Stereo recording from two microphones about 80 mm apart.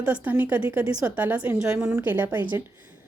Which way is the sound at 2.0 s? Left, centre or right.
Right.